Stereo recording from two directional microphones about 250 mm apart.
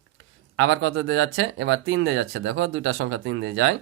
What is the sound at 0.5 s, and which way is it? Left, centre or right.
Speech, right.